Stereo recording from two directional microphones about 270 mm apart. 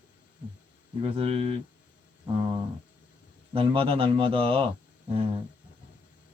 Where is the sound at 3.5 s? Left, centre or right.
Centre.